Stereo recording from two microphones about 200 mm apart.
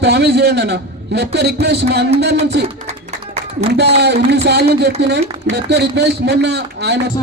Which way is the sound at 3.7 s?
55° right (ahead or behind).